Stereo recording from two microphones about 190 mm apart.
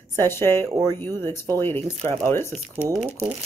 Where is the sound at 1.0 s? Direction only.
10° left (ahead or behind).